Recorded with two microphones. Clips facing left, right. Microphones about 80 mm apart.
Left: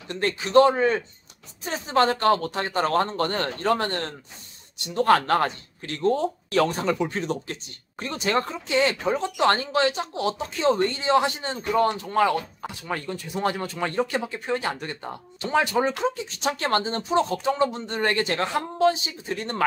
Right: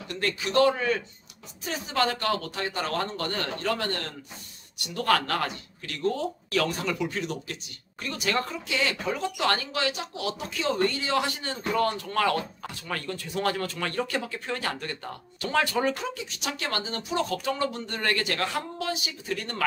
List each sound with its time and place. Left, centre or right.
0.1 s speech: left
16.0 s speech: left